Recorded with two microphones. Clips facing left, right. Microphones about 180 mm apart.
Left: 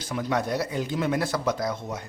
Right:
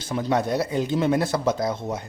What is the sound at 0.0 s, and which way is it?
A man's voice, 30° right (ahead or behind).